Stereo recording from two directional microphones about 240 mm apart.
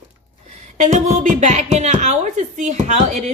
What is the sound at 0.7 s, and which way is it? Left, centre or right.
Speech, right.